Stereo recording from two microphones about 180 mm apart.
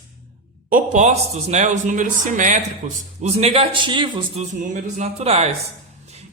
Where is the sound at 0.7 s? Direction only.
45° right (ahead or behind); by 4.5 s 25° right (ahead or behind).